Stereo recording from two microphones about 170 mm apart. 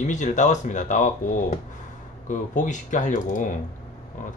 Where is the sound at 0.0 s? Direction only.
45° left (ahead or behind).